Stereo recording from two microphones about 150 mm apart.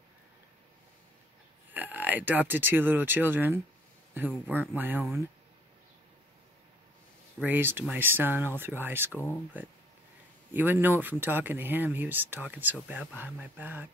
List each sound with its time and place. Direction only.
1.7 s speech: 10° right (ahead or behind)
7.3 s speech: 10° right (ahead or behind)
9.1 s speech: 15° left (ahead or behind)
10.5 s speech: 10° right (ahead or behind)